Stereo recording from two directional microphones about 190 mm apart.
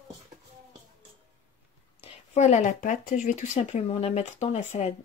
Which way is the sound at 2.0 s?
35° left (ahead or behind).